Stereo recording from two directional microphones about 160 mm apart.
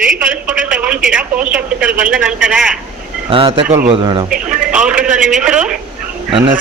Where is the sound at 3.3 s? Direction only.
35° right (ahead or behind).